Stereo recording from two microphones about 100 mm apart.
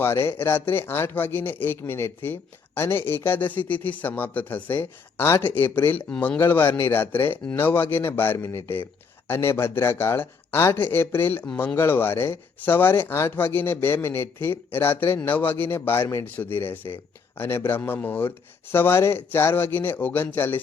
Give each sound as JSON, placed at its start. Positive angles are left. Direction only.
{"t": 0.0, "sound": "speech", "side_deg": 25}